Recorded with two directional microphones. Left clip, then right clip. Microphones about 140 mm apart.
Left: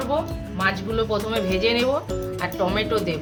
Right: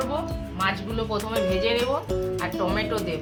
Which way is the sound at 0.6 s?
50° left (ahead or behind).